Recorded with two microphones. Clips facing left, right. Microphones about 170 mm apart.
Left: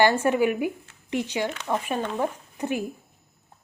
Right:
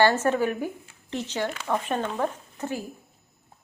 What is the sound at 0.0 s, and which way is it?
Speech, 15° left (ahead or behind).